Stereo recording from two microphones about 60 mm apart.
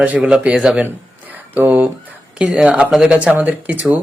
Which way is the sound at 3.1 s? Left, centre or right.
Right.